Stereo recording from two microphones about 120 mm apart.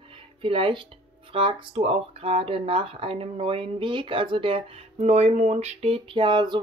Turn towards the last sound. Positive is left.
turn(degrees=-40)  # may be behind; listen again after turning